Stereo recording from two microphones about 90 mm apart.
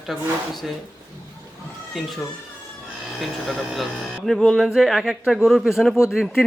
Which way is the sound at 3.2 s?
5° right (ahead or behind).